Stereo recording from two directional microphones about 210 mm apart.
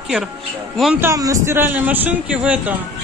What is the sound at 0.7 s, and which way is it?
A man's voice, 5° right (ahead or behind).